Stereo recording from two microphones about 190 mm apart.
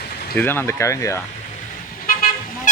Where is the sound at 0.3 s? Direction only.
10° left (ahead or behind).